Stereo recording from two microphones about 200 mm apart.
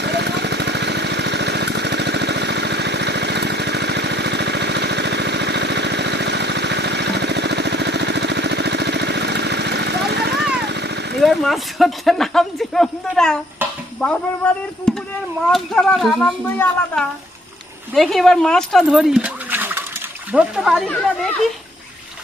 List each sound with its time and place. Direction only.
0.0 s lawn mower: 55° right (ahead or behind)
10.7 s vehicle: 55° right (ahead or behind)
11.2 s speech: centre (ahead or behind)
13.6 s dishes: 10° right (ahead or behind)
14.0 s speech: 5° left (ahead or behind)